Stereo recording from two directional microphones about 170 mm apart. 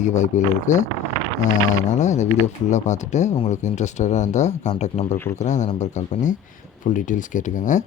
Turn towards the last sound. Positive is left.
turn(degrees=50)  # may be behind; listen again after turning